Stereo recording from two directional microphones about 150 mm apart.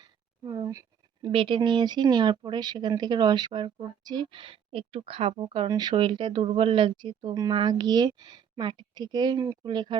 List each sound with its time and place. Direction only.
0.0 s a sound: 30° right (ahead or behind)
1.3 s speech: 35° right (ahead or behind)
5.6 s speech: 25° right (ahead or behind)